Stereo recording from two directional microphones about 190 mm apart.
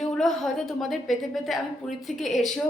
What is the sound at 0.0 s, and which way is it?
A woman's voice, centre (ahead or behind).